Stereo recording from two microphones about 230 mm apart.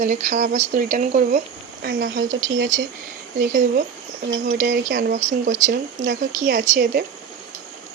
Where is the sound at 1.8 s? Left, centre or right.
Right.